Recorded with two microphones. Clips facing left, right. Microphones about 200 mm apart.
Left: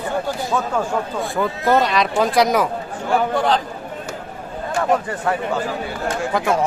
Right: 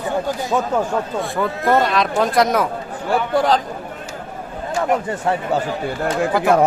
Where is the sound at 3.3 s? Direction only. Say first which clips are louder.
Right 6 dB; 40° right (ahead or behind).